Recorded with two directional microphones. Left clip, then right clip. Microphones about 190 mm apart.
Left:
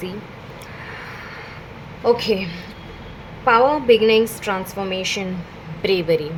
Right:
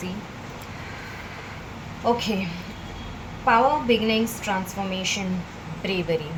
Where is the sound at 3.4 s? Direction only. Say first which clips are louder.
Left 4 dB; 50° left (ahead or behind).